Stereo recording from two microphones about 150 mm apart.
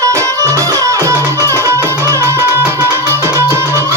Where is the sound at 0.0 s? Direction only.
20° right (ahead or behind).